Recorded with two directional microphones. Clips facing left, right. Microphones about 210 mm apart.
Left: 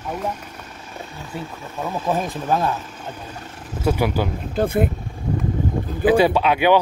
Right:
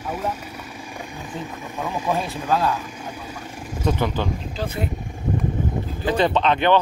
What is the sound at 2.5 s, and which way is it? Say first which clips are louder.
Speech: even; 20° left (ahead or behind).